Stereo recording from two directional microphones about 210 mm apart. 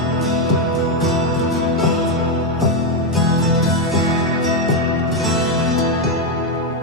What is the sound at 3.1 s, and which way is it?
Music, centre (ahead or behind).